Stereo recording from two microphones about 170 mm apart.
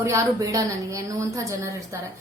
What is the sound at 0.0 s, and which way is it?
A woman's voice, 20° right (ahead or behind).